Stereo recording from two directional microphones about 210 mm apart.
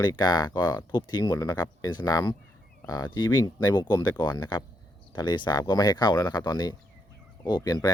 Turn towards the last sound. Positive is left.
turn(degrees=20)  # may be behind; listen again after turning